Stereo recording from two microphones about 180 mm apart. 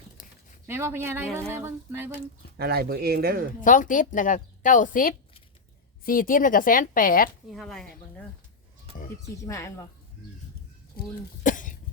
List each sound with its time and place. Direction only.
0.7 s a sound: 15° right (ahead or behind)
2.6 s speech: 60° right (ahead or behind)
3.6 s a woman's voice: 45° left (ahead or behind)
7.5 s speech: centre (ahead or behind)
9.2 s speech: 15° left (ahead or behind)
11.0 s speech: 55° left (ahead or behind)
11.4 s cough: 45° left (ahead or behind)